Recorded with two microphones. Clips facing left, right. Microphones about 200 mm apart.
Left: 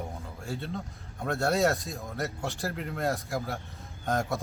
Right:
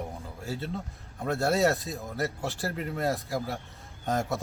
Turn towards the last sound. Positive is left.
turn(degrees=0)  # may be behind; listen again after turning